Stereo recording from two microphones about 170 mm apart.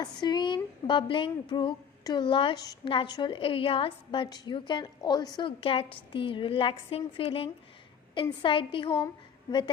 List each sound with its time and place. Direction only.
0.0 s a woman's voice: 25° left (ahead or behind)